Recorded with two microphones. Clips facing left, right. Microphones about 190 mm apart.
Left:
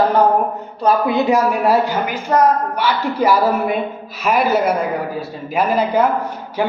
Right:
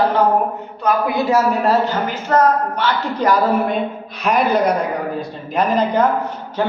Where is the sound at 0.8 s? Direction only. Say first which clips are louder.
Left 2 dB; 25° left (ahead or behind).